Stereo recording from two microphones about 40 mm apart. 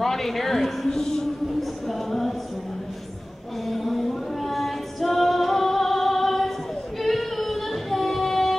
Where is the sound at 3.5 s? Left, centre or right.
Centre.